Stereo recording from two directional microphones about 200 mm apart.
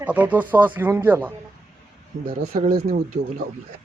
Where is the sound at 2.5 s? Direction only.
45° right (ahead or behind).